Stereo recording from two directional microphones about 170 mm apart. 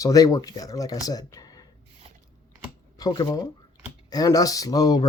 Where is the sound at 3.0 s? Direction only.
20° left (ahead or behind).